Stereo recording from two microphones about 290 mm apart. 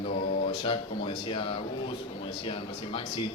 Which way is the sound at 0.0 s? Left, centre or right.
Left.